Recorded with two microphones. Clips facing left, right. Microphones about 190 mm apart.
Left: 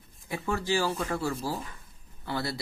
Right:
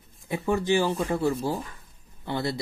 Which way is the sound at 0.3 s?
20° right (ahead or behind).